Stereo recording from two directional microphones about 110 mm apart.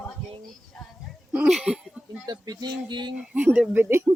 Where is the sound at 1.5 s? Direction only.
5° right (ahead or behind).